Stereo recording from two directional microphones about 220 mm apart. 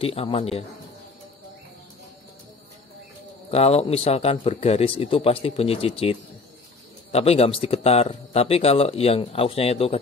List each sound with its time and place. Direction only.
0.0 s speech: 25° left (ahead or behind)
3.5 s speech: 25° left (ahead or behind)